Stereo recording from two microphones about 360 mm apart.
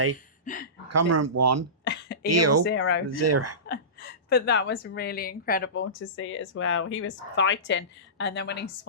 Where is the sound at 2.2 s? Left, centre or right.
Right.